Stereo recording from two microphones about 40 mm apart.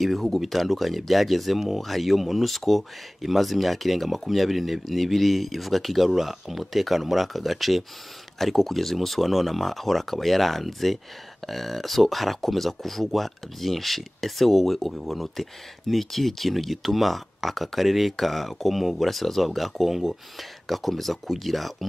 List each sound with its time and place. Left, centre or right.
0.0 s speech: centre